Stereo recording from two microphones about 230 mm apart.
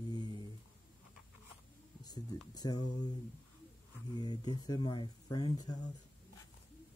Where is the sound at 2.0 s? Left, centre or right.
Centre.